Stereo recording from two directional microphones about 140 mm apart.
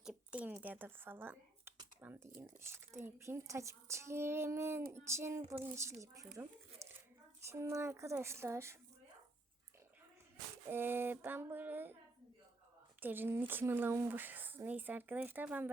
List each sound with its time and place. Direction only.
0.0 s a child's voice: 5° right (ahead or behind)
10.7 s speech: 15° right (ahead or behind)
13.0 s speech: 15° right (ahead or behind)